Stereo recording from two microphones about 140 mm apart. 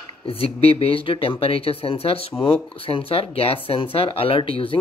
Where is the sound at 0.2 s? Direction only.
40° left (ahead or behind).